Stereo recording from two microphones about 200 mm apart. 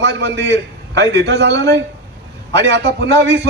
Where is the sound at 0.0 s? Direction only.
60° right (ahead or behind).